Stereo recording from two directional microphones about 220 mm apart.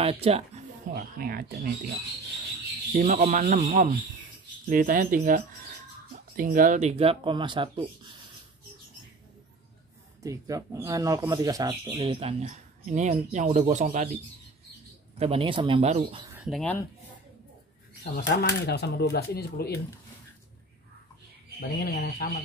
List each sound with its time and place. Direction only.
0.0 s speech: 25° right (ahead or behind)
0.9 s speech: 40° right (ahead or behind)
2.9 s speech: 30° right (ahead or behind)
10.2 s speech: 15° right (ahead or behind); by 14.1 s 35° right (ahead or behind)
15.1 s speech: 25° right (ahead or behind)
16.4 s speech: centre (ahead or behind)
18.1 s speech: 50° left (ahead or behind)
21.5 s speech: 45° left (ahead or behind)